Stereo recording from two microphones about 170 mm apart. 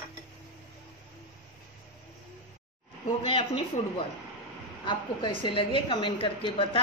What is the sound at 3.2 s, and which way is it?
Speech, 30° left (ahead or behind).